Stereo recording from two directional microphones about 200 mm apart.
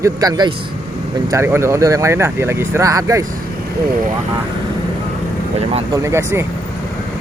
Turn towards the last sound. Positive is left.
turn(degrees=-15)  # may be behind; listen again after turning